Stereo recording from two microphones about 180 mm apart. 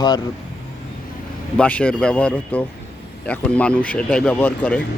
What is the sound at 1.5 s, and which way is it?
Speech, 5° left (ahead or behind).